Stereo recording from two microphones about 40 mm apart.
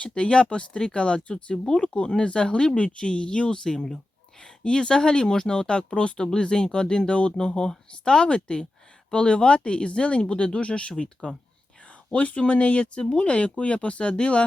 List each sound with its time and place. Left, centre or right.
0.0 s speech: left